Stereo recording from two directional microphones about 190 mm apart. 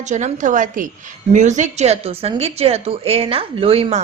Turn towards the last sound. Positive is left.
turn(degrees=-30)  # may be behind; listen again after turning